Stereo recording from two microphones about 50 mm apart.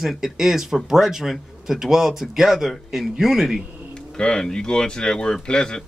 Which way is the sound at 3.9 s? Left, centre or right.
Centre.